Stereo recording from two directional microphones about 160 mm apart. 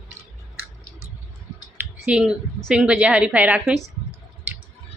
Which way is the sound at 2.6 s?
5° right (ahead or behind).